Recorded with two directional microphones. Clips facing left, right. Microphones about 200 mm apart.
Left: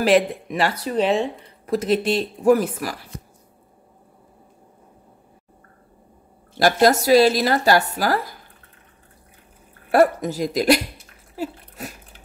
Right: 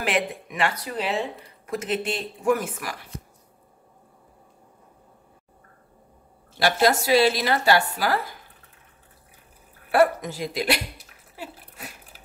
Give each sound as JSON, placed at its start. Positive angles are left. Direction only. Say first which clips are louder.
{"t": 0.0, "sound": "speech", "louder": "left 9 dB", "side_deg": 35}
{"t": 6.6, "sound": "speech", "louder": "left 5 dB", "side_deg": 40}
{"t": 9.8, "sound": "speech", "louder": "left 3 dB", "side_deg": 40}